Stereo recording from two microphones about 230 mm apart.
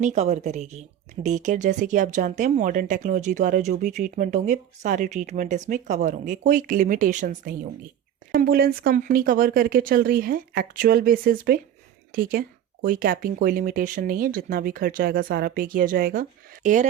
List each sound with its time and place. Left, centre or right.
0.0 s speech: right